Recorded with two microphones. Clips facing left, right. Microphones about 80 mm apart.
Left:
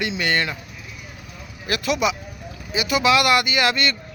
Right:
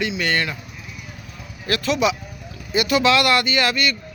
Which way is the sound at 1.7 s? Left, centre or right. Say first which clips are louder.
Right 1 dB; centre.